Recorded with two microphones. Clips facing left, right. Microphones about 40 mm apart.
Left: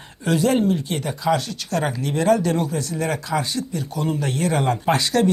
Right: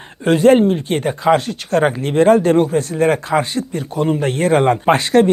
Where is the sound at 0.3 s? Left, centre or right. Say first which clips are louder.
Right 8 dB; right.